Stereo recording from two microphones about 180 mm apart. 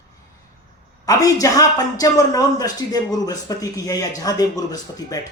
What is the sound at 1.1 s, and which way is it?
A man's voice, 20° left (ahead or behind).